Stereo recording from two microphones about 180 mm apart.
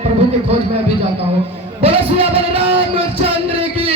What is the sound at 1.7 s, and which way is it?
Music, 30° right (ahead or behind).